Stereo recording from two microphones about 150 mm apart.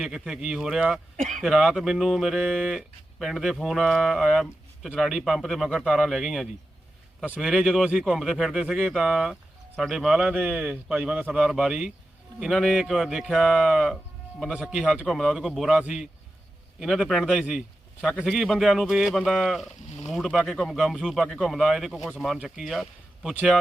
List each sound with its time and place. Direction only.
0.0 s speech: 5° right (ahead or behind)
1.1 s speech: 55° right (ahead or behind)
1.4 s speech: centre (ahead or behind)